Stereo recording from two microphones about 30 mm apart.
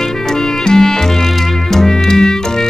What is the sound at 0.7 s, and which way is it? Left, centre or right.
Music, left.